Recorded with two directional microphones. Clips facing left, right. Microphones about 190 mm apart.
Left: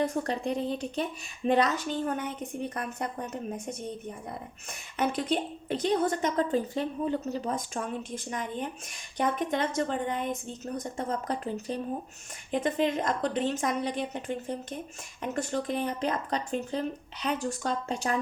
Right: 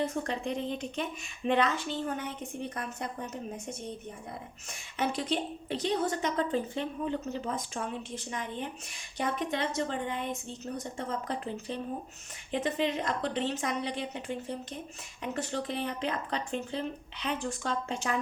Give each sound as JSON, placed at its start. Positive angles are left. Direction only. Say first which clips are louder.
{"t": 0.3, "sound": "a woman's voice", "louder": "left 3 dB", "side_deg": 35}
{"t": 4.7, "sound": "a woman's voice", "louder": "left 3 dB", "side_deg": 55}